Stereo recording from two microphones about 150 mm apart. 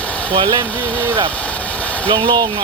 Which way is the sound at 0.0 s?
10° left (ahead or behind).